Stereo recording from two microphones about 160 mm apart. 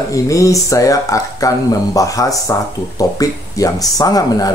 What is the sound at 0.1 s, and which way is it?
Speech, 20° left (ahead or behind).